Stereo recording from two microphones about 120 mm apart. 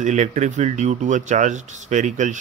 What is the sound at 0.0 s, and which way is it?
Speech, 90° right.